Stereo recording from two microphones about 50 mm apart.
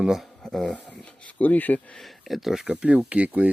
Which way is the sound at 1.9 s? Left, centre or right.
Centre.